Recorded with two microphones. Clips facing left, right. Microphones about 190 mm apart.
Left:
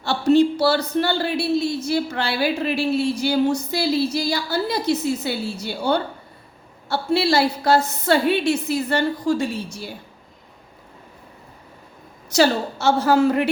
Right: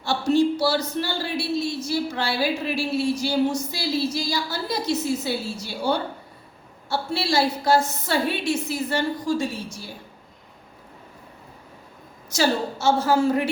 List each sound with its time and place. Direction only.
0.0 s a woman's voice: 65° left (ahead or behind)
12.3 s a woman's voice: 65° left (ahead or behind)